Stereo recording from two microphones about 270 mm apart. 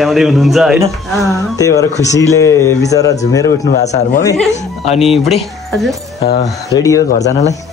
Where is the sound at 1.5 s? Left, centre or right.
Centre.